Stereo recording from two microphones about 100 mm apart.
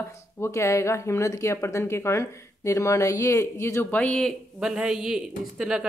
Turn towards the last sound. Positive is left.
turn(degrees=-5)  # may be behind; listen again after turning